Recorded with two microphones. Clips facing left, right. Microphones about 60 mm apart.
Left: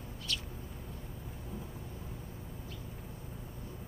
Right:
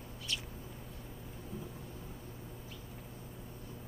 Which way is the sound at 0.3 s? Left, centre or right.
Right.